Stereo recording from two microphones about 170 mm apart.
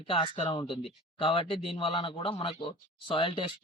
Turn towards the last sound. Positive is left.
turn(degrees=30)  # may be behind; listen again after turning